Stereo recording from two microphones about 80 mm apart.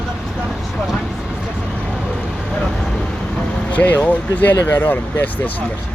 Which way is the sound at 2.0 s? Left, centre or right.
Centre.